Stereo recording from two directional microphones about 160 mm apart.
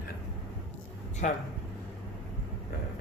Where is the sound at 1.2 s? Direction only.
50° left (ahead or behind).